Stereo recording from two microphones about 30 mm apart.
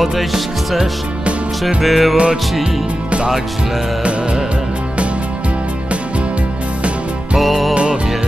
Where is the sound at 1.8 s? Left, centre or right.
Centre.